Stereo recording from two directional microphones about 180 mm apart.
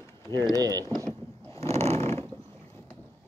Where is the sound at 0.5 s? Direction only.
20° right (ahead or behind).